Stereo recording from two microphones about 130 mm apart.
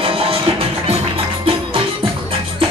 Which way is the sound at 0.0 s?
45° right (ahead or behind).